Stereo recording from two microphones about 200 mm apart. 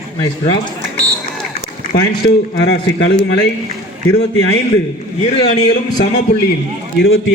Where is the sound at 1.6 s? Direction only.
55° left (ahead or behind).